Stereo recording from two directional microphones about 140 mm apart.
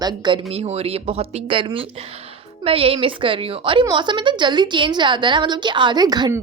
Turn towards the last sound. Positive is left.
turn(degrees=-30)  # may be behind; listen again after turning